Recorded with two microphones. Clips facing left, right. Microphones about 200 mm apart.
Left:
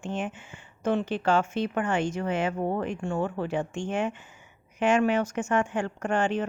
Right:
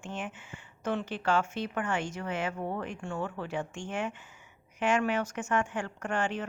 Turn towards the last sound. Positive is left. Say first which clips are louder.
# left 6 dB
turn(degrees=25)  # may be behind; listen again after turning